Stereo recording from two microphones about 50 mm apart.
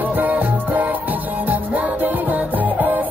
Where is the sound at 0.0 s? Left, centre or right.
Right.